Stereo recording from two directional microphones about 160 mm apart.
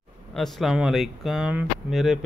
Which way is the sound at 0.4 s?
Centre (ahead or behind).